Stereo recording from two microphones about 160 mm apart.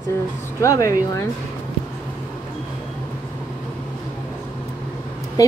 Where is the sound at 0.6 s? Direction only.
20° left (ahead or behind).